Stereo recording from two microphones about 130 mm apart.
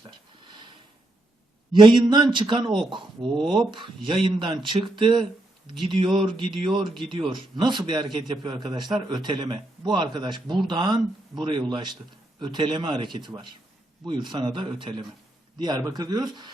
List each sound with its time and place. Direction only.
1.8 s a man's voice: 35° right (ahead or behind)